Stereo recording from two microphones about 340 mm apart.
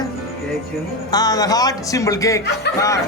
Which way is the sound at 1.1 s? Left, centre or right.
Centre.